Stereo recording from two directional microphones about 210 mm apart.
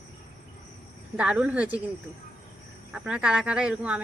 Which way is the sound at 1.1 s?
5° right (ahead or behind).